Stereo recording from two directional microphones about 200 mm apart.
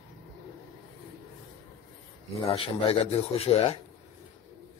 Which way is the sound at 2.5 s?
30° left (ahead or behind).